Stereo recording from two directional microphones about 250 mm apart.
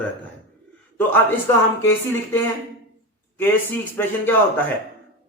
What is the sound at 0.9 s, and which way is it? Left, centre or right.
A man's voice, centre.